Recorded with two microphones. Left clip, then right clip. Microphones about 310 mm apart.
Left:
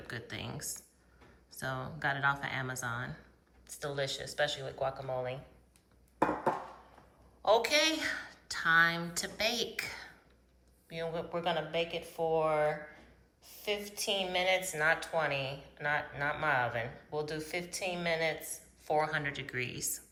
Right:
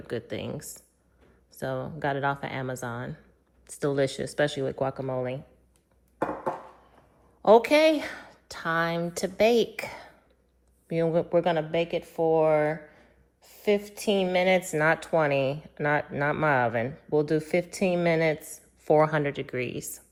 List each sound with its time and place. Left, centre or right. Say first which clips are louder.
0.1 s a woman's voice: right 9 dB; centre
7.4 s a woman's voice: right 9 dB; right